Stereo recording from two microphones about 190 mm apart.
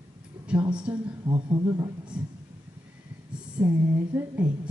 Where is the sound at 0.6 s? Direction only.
25° right (ahead or behind).